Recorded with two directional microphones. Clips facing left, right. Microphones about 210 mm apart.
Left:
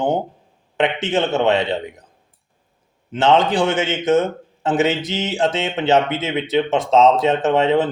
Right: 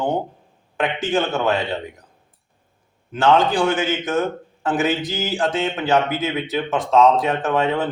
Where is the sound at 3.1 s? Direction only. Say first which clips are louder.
Left 1 dB; 25° left (ahead or behind).